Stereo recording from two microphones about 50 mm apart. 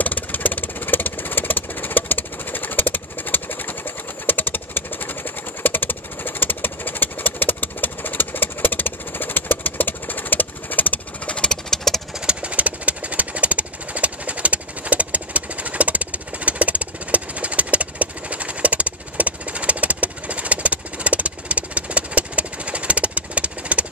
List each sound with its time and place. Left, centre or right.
0.0 s vehicle: left
4.3 s a sound: left
11.7 s engine: centre
12.3 s engine: right